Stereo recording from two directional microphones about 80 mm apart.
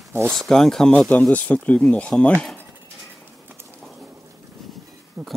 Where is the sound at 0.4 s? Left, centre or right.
Centre.